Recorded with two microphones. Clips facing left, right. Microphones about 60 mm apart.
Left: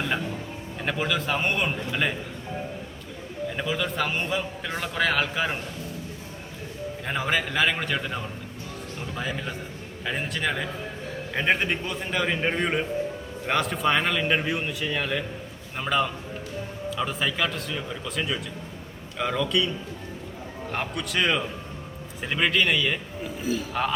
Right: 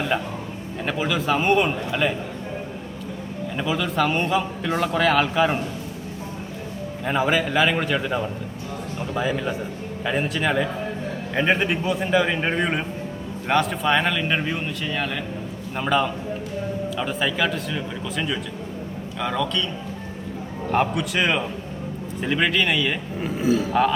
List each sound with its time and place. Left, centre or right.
0.9 s speech: centre
3.6 s speech: centre
7.0 s speech: centre
20.7 s speech: centre
23.4 s speech: right